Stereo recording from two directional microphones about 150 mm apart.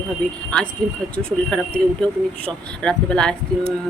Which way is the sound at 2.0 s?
5° left (ahead or behind).